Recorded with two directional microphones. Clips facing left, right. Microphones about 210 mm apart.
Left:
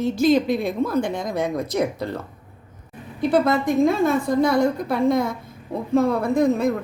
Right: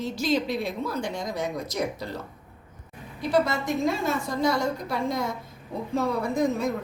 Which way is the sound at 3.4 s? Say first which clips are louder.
Left 7 dB; 55° left (ahead or behind).